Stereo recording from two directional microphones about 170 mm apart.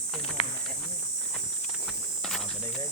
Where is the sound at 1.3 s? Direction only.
5° right (ahead or behind).